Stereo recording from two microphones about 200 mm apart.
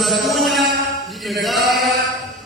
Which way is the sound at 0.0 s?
Centre (ahead or behind).